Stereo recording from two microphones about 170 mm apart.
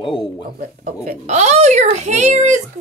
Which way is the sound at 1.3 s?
40° right (ahead or behind).